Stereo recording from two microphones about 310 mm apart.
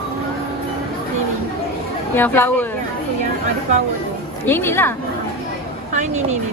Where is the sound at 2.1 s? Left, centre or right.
Centre.